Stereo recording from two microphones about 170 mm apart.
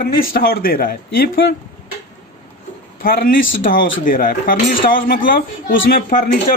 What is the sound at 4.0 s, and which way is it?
Speech, 55° left (ahead or behind).